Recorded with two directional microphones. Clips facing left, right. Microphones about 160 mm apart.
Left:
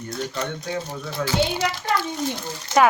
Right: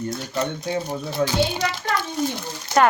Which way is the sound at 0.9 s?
15° right (ahead or behind).